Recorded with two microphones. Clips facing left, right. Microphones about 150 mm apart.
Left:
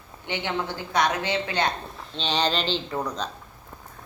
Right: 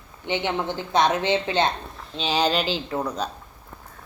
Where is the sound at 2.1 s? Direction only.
5° right (ahead or behind).